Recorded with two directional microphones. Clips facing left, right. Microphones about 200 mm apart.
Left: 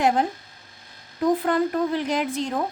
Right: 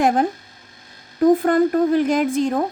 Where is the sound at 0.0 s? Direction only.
45° right (ahead or behind).